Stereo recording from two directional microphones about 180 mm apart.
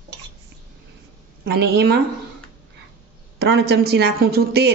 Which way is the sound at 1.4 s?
65° right (ahead or behind).